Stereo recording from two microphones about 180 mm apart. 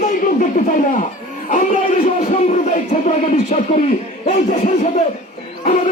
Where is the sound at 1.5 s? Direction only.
45° left (ahead or behind).